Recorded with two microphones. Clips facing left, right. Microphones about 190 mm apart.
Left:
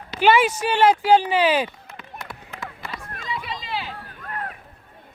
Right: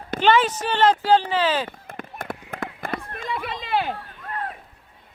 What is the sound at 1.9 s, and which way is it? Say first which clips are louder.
Run: right 5 dB; 50° right (ahead or behind).